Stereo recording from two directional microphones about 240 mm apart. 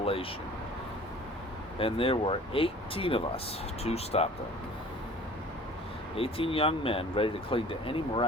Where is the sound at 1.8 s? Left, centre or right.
Left.